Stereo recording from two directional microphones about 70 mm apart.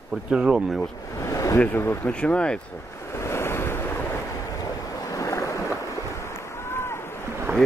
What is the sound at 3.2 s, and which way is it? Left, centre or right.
Waves, left.